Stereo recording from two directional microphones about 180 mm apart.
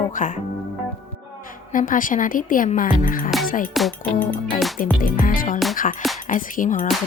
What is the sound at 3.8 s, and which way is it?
Music, 5° left (ahead or behind).